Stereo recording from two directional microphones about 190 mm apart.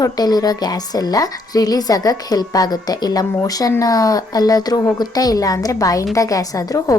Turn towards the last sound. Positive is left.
turn(degrees=20)  # may be behind; listen again after turning